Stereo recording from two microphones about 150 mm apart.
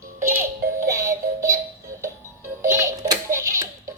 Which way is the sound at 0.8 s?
20° right (ahead or behind).